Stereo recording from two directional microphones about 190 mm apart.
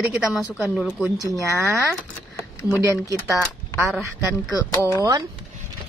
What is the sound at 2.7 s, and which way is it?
Speech, 15° right (ahead or behind).